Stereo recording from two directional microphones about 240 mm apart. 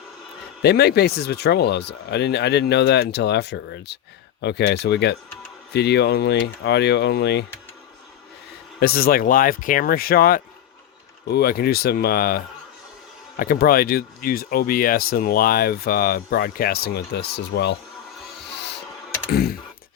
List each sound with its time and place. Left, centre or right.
0.6 s speech: left
8.8 s speech: left
18.5 s music: left
19.3 s computer keyboard: left